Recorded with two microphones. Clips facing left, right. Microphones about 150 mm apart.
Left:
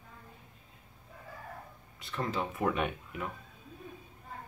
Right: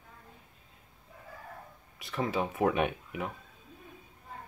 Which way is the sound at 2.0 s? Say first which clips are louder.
Right 3 dB; 85° right.